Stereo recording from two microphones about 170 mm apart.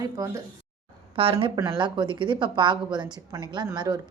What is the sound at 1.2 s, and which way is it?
Speech, 35° right (ahead or behind).